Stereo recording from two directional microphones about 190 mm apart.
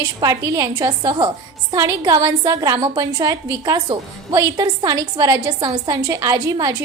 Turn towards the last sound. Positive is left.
turn(degrees=-20)  # may be behind; listen again after turning